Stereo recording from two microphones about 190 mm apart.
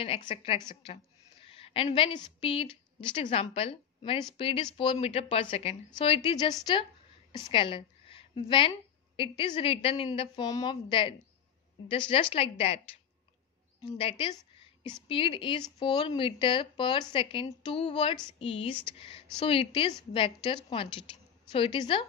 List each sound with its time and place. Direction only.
0.0 s a woman's voice: 30° left (ahead or behind)
7.3 s a sound: 25° left (ahead or behind)
9.4 s a woman's voice: 30° left (ahead or behind)
13.8 s a woman's voice: 30° left (ahead or behind)